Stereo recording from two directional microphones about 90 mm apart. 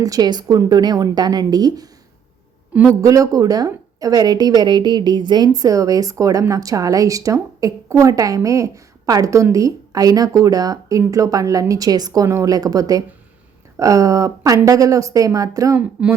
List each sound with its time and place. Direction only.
0.0 s a woman's voice: 45° right (ahead or behind)
5.5 s a woman's voice: 40° right (ahead or behind)
16.0 s speech: 15° right (ahead or behind)